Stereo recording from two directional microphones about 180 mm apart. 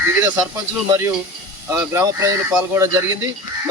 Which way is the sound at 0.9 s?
15° right (ahead or behind).